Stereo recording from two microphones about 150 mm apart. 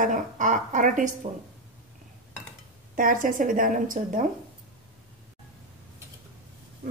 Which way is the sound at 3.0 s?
65° right (ahead or behind).